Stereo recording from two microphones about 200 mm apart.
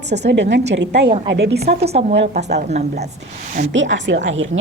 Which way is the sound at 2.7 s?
35° right (ahead or behind).